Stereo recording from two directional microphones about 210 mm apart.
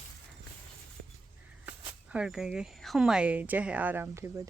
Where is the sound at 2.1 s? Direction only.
5° right (ahead or behind).